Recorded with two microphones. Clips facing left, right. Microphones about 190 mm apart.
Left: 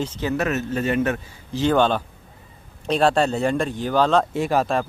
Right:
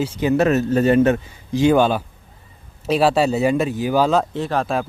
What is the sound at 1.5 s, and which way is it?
Speech, 10° right (ahead or behind).